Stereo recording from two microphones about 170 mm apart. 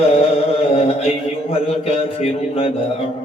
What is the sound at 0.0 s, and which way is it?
Mantra, 35° left (ahead or behind).